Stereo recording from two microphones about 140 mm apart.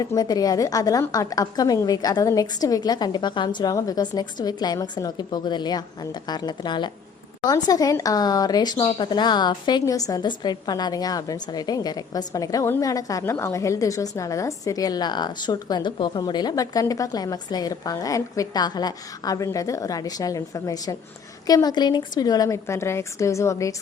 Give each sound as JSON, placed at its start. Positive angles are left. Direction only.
{"t": 0.0, "sound": "speech", "side_deg": 25}